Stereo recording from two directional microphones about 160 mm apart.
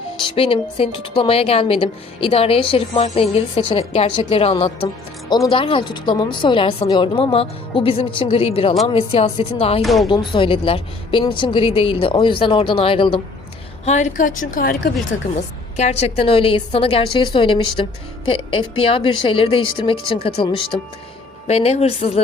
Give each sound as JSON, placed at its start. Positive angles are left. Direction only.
{"t": 0.2, "sound": "a woman's voice", "side_deg": 35}
{"t": 9.8, "sound": "speech", "side_deg": 0}
{"t": 10.1, "sound": "a woman's voice", "side_deg": 30}
{"t": 13.8, "sound": "a woman's voice", "side_deg": 50}
{"t": 15.7, "sound": "a woman's voice", "side_deg": 45}